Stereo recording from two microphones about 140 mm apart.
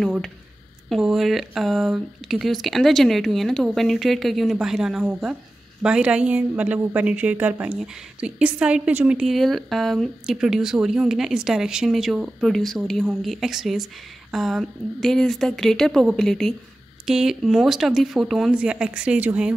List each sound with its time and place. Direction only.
0.8 s a woman's voice: centre (ahead or behind)